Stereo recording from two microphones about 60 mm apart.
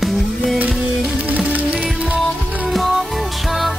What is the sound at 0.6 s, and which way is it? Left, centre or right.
Music, centre.